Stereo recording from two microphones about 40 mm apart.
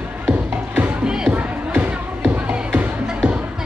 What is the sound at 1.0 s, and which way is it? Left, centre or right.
Music, right.